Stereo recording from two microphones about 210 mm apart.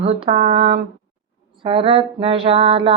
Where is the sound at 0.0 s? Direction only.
30° right (ahead or behind).